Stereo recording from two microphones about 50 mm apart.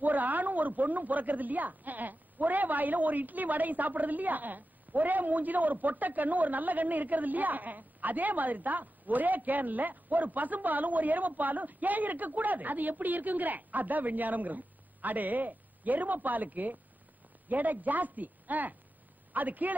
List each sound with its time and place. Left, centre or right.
0.0 s speech: right